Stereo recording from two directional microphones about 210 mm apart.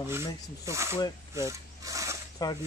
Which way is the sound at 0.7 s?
15° right (ahead or behind).